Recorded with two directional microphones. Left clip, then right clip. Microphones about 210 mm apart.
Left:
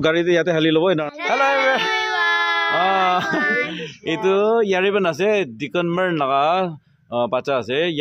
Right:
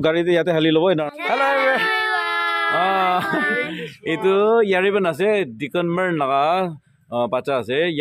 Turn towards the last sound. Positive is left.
turn(degrees=0)  # may be behind; listen again after turning